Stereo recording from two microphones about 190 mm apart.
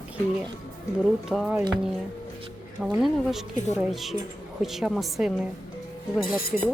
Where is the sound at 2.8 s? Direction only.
5° right (ahead or behind).